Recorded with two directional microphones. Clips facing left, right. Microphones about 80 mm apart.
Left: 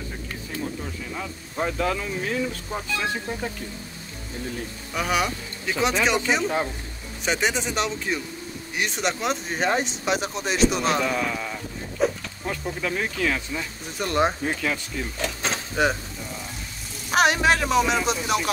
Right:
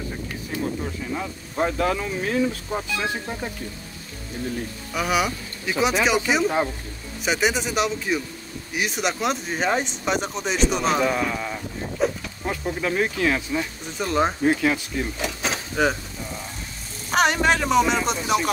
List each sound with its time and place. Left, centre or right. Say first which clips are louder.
1.1 s speech: right 3 dB; centre
2.7 s speech: right 1 dB; centre
4.9 s speech: right 1 dB; centre
12.0 s a sound: even; centre
12.4 s speech: right 3 dB; centre
13.8 s speech: left 1 dB; centre
14.4 s speech: right 6 dB; centre
15.1 s a sound: right 1 dB; centre
17.1 s speech: even; centre